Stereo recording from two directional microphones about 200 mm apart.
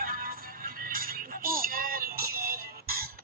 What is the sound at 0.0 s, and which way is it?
Music, 45° right (ahead or behind).